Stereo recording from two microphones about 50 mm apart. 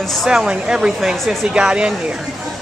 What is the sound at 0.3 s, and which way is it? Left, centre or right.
Speech, centre.